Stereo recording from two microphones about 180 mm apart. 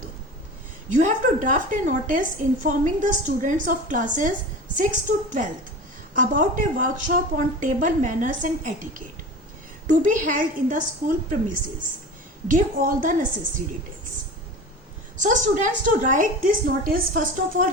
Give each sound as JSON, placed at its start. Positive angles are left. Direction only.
{"t": 0.9, "sound": "a woman's voice", "side_deg": -45}
{"t": 15.2, "sound": "a woman's voice", "side_deg": -45}